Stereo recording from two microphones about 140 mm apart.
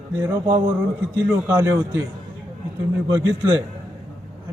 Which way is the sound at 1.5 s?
20° right (ahead or behind).